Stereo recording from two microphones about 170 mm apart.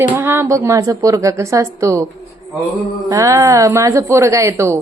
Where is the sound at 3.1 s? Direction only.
20° right (ahead or behind).